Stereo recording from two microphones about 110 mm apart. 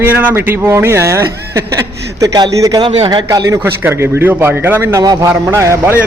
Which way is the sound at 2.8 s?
60° right (ahead or behind).